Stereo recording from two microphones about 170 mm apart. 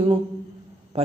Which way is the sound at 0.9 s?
35° right (ahead or behind).